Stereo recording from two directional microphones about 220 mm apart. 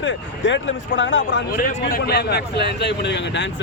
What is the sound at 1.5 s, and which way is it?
A man's voice, 40° left (ahead or behind).